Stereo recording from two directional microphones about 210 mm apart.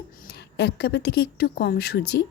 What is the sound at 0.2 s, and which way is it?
Speech, 50° left (ahead or behind).